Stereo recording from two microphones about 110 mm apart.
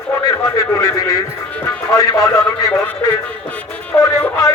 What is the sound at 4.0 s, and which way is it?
Speech, 20° left (ahead or behind).